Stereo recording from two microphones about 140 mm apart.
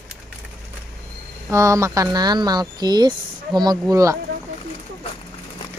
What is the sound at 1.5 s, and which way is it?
Speech, 20° right (ahead or behind).